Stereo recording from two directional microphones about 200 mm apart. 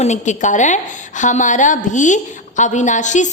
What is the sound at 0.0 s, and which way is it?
A woman's voice, 35° left (ahead or behind).